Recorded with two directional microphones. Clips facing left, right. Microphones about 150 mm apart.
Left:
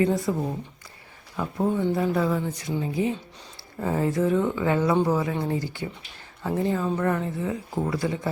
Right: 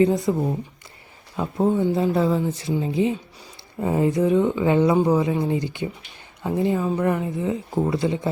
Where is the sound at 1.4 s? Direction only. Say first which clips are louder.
Right 4 dB; 20° right (ahead or behind).